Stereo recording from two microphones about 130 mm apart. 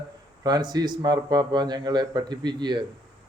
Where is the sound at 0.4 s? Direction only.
30° right (ahead or behind).